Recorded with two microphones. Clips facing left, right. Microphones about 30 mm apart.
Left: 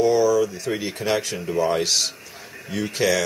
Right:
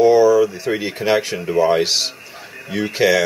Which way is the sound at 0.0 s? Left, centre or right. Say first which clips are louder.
Right 6 dB; right.